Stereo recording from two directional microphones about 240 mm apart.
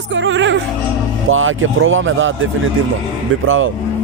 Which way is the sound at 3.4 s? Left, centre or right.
Right.